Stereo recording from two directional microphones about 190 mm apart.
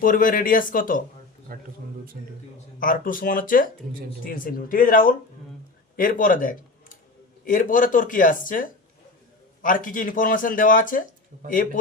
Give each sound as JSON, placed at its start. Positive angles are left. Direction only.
{"t": 0.0, "sound": "speech", "side_deg": 45}
{"t": 1.5, "sound": "speech", "side_deg": -50}
{"t": 2.7, "sound": "speech", "side_deg": 45}